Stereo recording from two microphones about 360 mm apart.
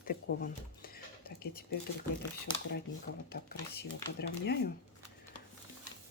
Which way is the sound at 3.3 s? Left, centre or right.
Left.